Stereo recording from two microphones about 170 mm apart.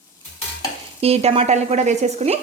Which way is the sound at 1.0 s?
35° right (ahead or behind).